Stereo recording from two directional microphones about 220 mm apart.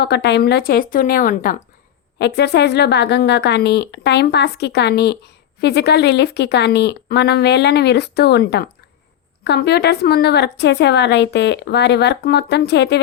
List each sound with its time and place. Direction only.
0.0 s a woman's voice: 50° left (ahead or behind)
2.1 s a woman's voice: 50° left (ahead or behind)